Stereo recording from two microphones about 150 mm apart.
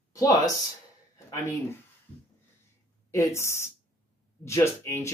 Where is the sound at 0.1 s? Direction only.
25° left (ahead or behind).